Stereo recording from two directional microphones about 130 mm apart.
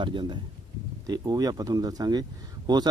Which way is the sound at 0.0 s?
35° right (ahead or behind).